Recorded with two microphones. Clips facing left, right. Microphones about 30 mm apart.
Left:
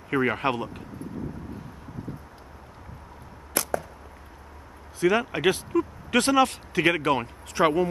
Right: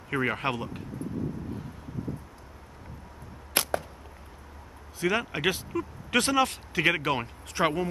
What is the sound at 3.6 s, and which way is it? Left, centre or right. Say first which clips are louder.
Arrow: right 1 dB; right.